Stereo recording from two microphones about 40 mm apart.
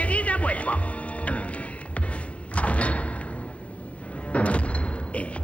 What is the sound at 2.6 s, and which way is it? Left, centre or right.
Door, left.